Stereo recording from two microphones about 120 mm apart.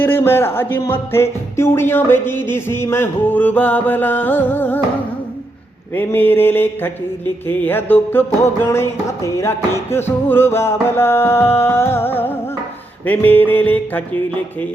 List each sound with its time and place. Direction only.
0.0 s music: 20° left (ahead or behind)
5.9 s music: 15° left (ahead or behind)